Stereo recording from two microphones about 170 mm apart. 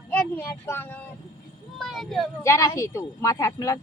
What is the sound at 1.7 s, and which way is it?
Speech, centre (ahead or behind).